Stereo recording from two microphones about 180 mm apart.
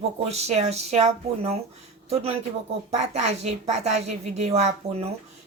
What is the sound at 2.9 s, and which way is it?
Speech, 35° right (ahead or behind).